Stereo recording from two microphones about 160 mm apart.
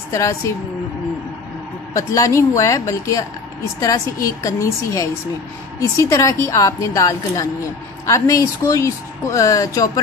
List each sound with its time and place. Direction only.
0.1 s speech: 20° left (ahead or behind)
2.0 s speech: 20° left (ahead or behind)